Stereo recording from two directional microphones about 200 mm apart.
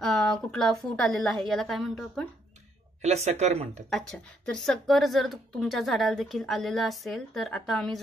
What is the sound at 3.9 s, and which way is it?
A woman's voice, 5° left (ahead or behind).